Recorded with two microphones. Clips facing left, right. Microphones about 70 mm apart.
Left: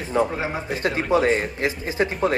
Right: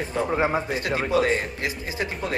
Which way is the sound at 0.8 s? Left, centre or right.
Left.